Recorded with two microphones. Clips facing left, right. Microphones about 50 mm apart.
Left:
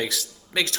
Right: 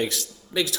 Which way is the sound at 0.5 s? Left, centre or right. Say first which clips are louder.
Even; left.